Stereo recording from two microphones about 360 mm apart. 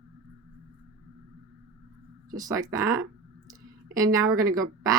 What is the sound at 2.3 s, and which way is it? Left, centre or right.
Speech, centre.